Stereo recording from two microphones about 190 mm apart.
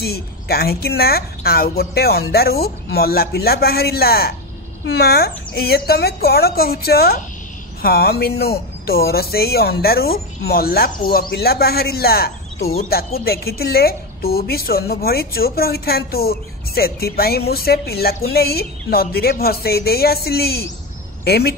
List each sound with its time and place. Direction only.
0.0 s speech: 55° left (ahead or behind)